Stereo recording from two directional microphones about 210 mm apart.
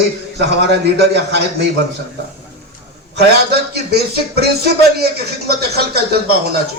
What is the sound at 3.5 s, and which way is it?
Speech, 50° right (ahead or behind).